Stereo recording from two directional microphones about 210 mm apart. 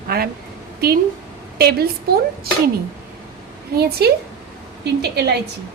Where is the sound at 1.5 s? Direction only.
50° right (ahead or behind).